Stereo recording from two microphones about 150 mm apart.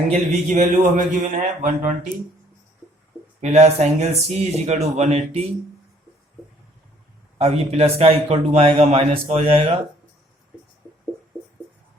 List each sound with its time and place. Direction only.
0.1 s a man's voice: 50° right (ahead or behind)
3.4 s speech: 45° right (ahead or behind)
7.3 s a man's voice: 45° right (ahead or behind)